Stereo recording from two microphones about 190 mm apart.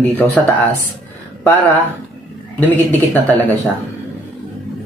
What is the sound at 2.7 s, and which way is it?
Speech, 10° left (ahead or behind).